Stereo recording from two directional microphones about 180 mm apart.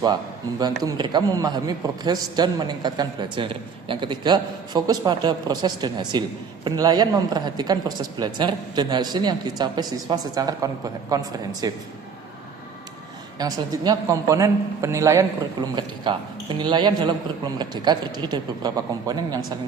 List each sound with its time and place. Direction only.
0.8 s a man's voice: 20° right (ahead or behind)
13.4 s a man's voice: 20° right (ahead or behind)